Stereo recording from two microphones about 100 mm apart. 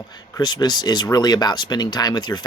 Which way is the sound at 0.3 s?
45° left (ahead or behind).